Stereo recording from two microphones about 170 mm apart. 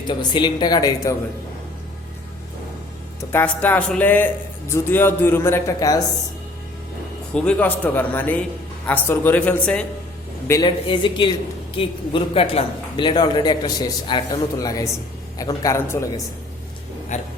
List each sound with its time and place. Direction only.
0.1 s a man's voice: 25° left (ahead or behind)
3.3 s a man's voice: 10° left (ahead or behind)
7.3 s a man's voice: 10° left (ahead or behind)
10.5 s a man's voice: 25° left (ahead or behind)
17.1 s speech: 45° left (ahead or behind)